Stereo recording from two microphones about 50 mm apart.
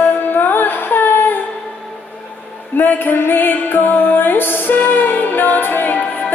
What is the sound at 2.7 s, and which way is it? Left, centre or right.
Music, left.